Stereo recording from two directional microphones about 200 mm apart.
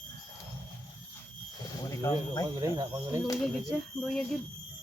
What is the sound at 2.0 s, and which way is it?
Speech, 15° left (ahead or behind).